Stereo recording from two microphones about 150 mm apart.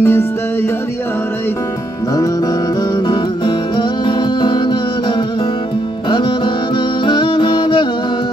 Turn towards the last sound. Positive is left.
turn(degrees=30)  # may be behind; listen again after turning